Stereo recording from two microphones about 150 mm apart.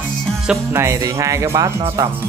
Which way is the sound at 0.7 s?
20° right (ahead or behind).